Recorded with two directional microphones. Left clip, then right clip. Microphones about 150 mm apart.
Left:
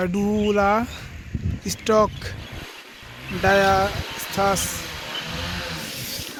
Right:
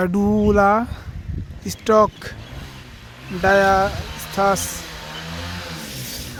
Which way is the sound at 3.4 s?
20° right (ahead or behind).